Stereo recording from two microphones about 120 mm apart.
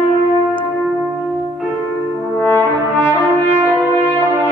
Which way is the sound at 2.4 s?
15° left (ahead or behind).